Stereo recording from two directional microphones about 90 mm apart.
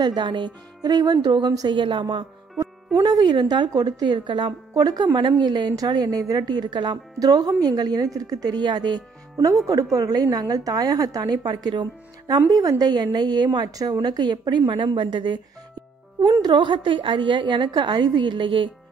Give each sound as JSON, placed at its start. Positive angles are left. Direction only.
{"t": 0.0, "sound": "a woman's voice", "side_deg": -55}
{"t": 3.0, "sound": "a woman's voice", "side_deg": -50}
{"t": 14.7, "sound": "a woman's voice", "side_deg": -65}
{"t": 16.4, "sound": "a woman's voice", "side_deg": -65}